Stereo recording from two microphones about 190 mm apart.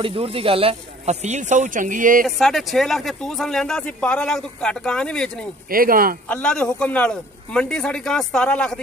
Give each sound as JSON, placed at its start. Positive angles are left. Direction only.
{"t": 0.0, "sound": "speech", "side_deg": -30}
{"t": 2.2, "sound": "speech", "side_deg": 0}
{"t": 5.7, "sound": "speech", "side_deg": -50}
{"t": 6.2, "sound": "speech", "side_deg": 5}